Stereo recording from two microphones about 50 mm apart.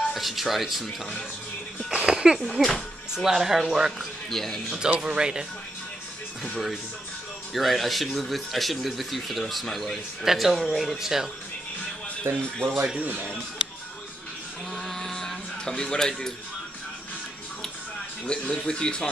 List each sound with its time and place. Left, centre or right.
0.1 s speech: centre
1.9 s speech: centre
2.4 s speech: centre
3.3 s speech: centre
4.3 s speech: centre
4.7 s speech: centre
7.5 s speech: centre
12.2 s speech: right
14.7 s music: centre
18.2 s speech: left